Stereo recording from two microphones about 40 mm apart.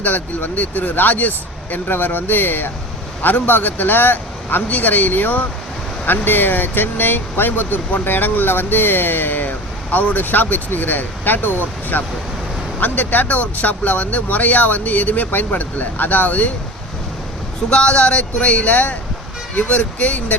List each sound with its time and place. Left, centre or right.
0.0 s speech: left
17.7 s speech: left